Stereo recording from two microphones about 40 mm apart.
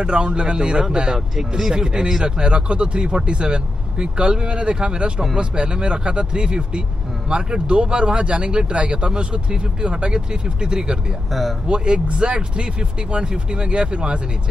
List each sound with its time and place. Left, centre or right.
0.0 s speech: right